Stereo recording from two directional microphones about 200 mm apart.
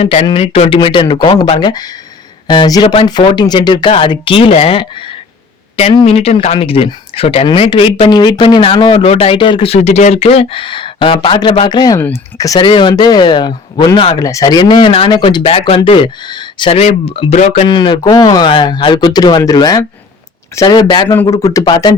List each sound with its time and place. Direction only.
0.0 s speech: 30° left (ahead or behind)
17.7 s speech: 25° left (ahead or behind)